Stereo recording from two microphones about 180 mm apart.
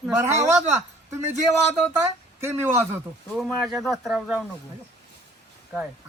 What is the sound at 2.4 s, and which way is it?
Speech, 10° right (ahead or behind).